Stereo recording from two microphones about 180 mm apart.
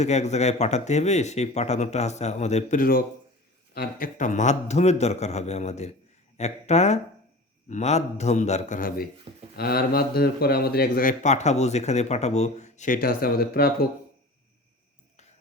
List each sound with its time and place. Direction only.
0.0 s speech: 40° left (ahead or behind)
9.6 s speech: 60° left (ahead or behind)